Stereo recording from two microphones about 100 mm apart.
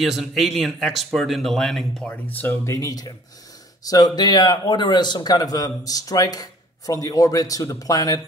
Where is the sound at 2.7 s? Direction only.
35° left (ahead or behind).